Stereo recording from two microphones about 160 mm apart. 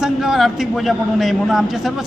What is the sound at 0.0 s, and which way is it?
A man's voice, centre (ahead or behind).